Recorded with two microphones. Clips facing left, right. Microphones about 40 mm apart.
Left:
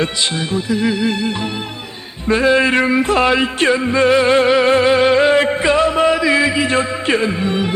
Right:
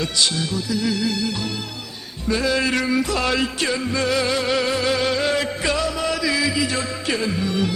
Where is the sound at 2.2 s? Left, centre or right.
Left.